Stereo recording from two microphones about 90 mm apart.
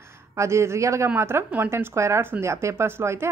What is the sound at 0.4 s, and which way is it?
A woman's voice, 30° right (ahead or behind).